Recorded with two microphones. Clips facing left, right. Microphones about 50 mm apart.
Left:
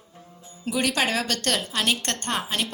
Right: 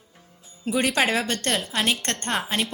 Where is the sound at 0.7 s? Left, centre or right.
Right.